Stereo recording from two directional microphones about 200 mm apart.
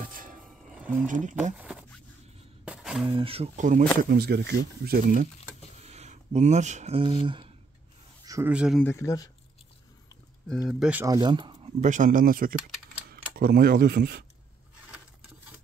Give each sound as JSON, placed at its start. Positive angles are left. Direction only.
{"t": 0.0, "sound": "vehicle", "side_deg": -45}
{"t": 1.0, "sound": "speech", "side_deg": -40}
{"t": 1.6, "sound": "a sound", "side_deg": -5}
{"t": 3.1, "sound": "speech", "side_deg": -25}
{"t": 4.0, "sound": "speech", "side_deg": -55}
{"t": 8.3, "sound": "speech", "side_deg": -10}
{"t": 8.8, "sound": "speech", "side_deg": 15}
{"t": 10.7, "sound": "speech", "side_deg": -5}
{"t": 11.1, "sound": "speech", "side_deg": -20}
{"t": 11.8, "sound": "speech", "side_deg": -40}